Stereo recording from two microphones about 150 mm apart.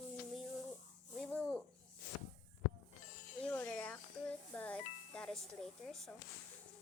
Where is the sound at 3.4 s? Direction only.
10° left (ahead or behind).